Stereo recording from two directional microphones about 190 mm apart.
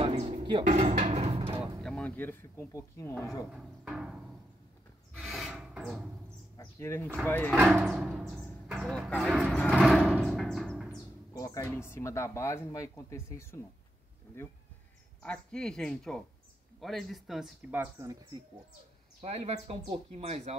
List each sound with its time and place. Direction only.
0.0 s a sound: 25° right (ahead or behind)
0.7 s a sound: 35° right (ahead or behind)
1.6 s speech: 5° left (ahead or behind)
3.5 s speech: 5° right (ahead or behind)
5.1 s a sound: centre (ahead or behind)
6.5 s speech: 15° left (ahead or behind)
7.7 s a sound: 10° right (ahead or behind)
8.6 s speech: centre (ahead or behind)
9.9 s music: centre (ahead or behind)
11.3 s speech: 15° left (ahead or behind)
15.2 s speech: 5° left (ahead or behind); by 18.4 s 15° right (ahead or behind)
19.2 s speech: 35° right (ahead or behind)